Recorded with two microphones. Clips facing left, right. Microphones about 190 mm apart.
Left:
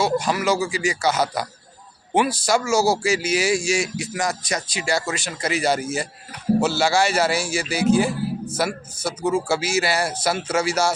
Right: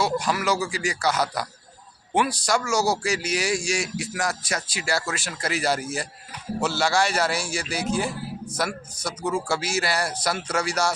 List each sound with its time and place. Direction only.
0.0 s speech: centre (ahead or behind)
9.0 s speech: 25° left (ahead or behind)
9.5 s speech: 5° left (ahead or behind)